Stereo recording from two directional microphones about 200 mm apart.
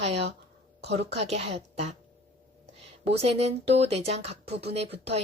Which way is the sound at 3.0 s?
30° right (ahead or behind).